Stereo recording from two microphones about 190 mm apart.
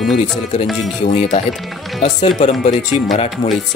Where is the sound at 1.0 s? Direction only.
35° left (ahead or behind).